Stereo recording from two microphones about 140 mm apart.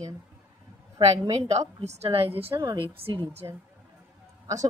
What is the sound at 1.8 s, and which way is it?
Speech, 50° right (ahead or behind).